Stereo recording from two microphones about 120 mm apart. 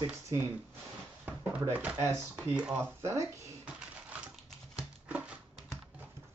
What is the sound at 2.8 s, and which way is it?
Speech, 25° right (ahead or behind).